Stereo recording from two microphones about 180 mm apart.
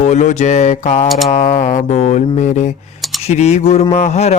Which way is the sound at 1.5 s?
45° left (ahead or behind).